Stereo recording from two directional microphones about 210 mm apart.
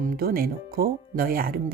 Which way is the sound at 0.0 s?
45° right (ahead or behind).